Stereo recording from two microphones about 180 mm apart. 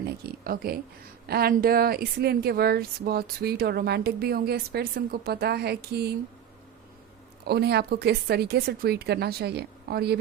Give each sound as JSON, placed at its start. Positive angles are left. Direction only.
{"t": 0.0, "sound": "speech", "side_deg": -60}
{"t": 7.4, "sound": "speech", "side_deg": -65}